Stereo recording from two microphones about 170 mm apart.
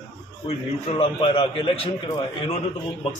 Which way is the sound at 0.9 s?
35° left (ahead or behind).